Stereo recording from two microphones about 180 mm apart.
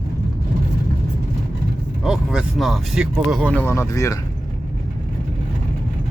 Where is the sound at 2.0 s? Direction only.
5° right (ahead or behind).